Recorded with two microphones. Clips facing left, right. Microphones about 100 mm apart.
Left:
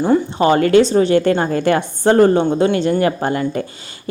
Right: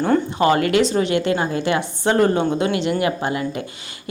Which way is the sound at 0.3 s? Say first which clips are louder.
Left 6 dB; 30° left (ahead or behind).